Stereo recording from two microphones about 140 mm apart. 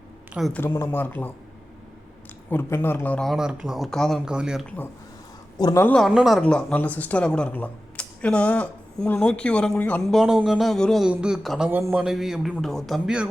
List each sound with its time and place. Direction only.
0.5 s speech: 15° left (ahead or behind)
2.5 s speech: 15° left (ahead or behind); by 4.6 s 5° right (ahead or behind)
5.5 s a man's voice: 25° left (ahead or behind)
5.8 s speech: 5° left (ahead or behind)
11.7 s a man's voice: 15° right (ahead or behind)
12.0 s speech: 5° right (ahead or behind)